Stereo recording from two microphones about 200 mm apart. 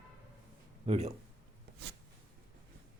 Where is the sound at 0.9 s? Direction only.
35° right (ahead or behind).